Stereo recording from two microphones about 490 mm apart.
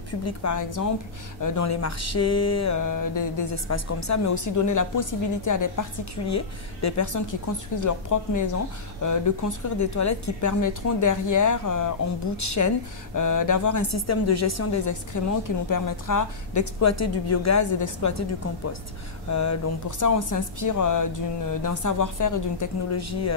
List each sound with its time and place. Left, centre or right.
0.2 s speech: left
19.2 s speech: left